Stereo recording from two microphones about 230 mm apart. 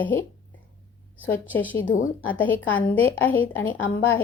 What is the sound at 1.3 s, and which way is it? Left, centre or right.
Speech, centre.